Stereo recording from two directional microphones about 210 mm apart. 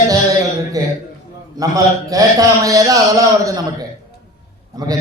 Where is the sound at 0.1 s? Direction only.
15° right (ahead or behind).